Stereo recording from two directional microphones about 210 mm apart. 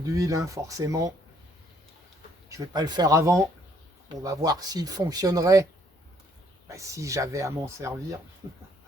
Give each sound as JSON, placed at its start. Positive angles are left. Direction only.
{"t": 0.0, "sound": "speech", "side_deg": -15}
{"t": 2.5, "sound": "speech", "side_deg": -20}
{"t": 6.7, "sound": "speech", "side_deg": -15}